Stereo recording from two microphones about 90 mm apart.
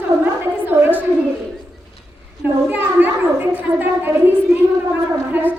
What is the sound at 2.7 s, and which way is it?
A woman's voice, 20° right (ahead or behind).